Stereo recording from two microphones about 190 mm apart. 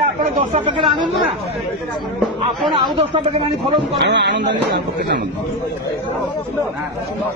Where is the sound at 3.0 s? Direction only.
25° right (ahead or behind).